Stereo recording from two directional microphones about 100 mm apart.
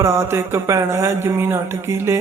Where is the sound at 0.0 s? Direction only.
30° right (ahead or behind).